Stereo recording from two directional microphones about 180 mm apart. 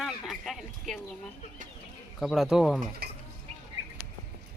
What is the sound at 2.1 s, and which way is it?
Speech, centre (ahead or behind).